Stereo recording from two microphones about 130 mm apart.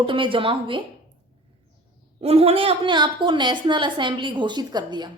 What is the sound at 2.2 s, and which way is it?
A woman's voice, 50° right (ahead or behind).